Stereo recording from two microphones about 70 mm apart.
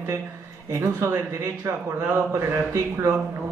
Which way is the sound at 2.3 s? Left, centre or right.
Right.